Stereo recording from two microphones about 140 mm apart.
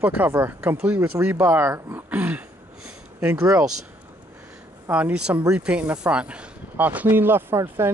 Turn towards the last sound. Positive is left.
turn(degrees=-20)  # may be behind; listen again after turning